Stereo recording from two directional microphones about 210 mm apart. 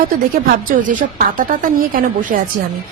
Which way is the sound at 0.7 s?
40° right (ahead or behind).